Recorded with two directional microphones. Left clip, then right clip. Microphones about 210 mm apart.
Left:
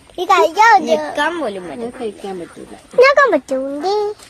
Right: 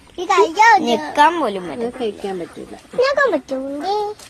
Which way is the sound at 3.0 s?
30° left (ahead or behind).